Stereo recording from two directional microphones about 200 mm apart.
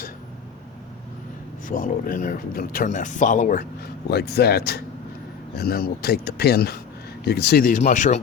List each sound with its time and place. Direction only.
1.6 s speech: 40° left (ahead or behind)
4.1 s speech: 55° left (ahead or behind); by 8.2 s 40° left (ahead or behind)